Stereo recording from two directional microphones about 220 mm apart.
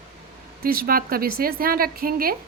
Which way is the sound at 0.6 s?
40° right (ahead or behind).